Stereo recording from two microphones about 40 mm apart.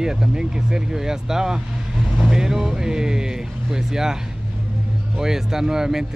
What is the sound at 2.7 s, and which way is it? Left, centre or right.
Music, centre.